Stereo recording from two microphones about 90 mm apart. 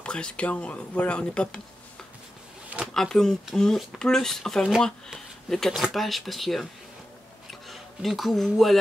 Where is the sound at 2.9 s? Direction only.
5° left (ahead or behind).